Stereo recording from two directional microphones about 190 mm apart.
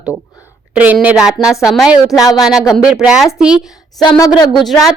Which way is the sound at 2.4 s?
Centre (ahead or behind).